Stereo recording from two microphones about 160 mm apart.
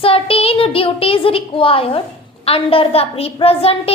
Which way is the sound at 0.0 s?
35° left (ahead or behind).